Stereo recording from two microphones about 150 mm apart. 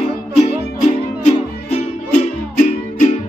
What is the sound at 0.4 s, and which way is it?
Music, 45° left (ahead or behind).